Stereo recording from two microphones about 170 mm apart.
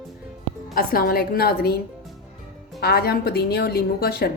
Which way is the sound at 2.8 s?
65° left (ahead or behind).